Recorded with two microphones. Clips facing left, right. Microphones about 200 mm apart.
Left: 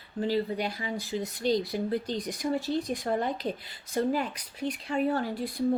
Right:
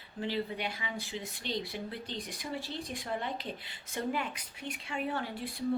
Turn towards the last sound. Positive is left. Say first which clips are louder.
# left 7 dB
turn(degrees=40)  # may be behind; listen again after turning